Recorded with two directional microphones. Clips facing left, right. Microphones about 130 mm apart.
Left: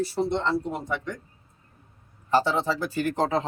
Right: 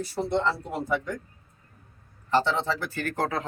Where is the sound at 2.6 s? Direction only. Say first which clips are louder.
Left 3 dB; 15° left (ahead or behind).